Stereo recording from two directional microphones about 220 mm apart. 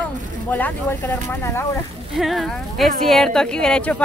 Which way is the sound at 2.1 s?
Centre (ahead or behind).